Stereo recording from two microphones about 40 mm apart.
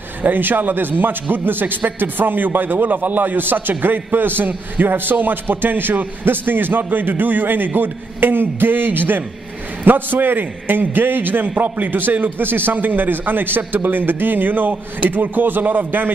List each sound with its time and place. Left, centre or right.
0.2 s a man's voice: right